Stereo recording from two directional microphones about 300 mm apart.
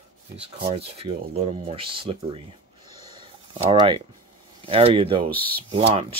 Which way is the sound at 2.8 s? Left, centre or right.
Left.